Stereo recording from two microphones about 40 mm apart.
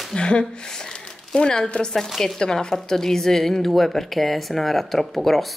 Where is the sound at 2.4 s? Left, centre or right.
Centre.